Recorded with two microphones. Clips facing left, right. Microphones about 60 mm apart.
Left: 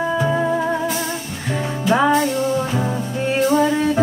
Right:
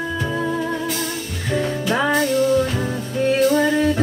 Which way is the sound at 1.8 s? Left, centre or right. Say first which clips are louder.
Left 6 dB; centre.